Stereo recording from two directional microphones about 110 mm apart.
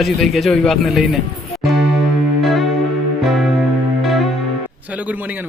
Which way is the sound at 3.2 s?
Centre (ahead or behind).